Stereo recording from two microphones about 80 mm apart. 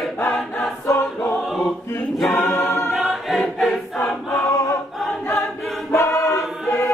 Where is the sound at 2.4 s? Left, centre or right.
Left.